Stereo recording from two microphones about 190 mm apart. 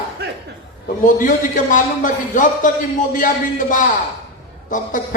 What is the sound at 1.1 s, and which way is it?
Speech, 45° left (ahead or behind).